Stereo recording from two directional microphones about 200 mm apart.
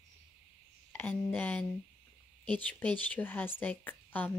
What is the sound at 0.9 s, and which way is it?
Speech, 10° left (ahead or behind).